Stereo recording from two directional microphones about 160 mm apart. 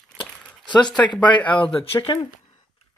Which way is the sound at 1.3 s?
30° left (ahead or behind).